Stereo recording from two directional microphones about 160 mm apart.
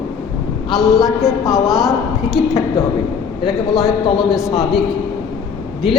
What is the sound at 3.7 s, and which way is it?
Speech, centre (ahead or behind).